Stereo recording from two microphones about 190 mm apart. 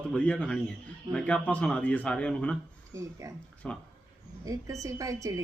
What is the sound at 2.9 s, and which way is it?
Speech, 15° right (ahead or behind).